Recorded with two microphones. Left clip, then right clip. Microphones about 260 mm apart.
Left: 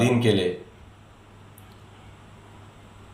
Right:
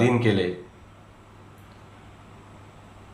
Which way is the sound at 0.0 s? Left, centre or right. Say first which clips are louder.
Even; centre.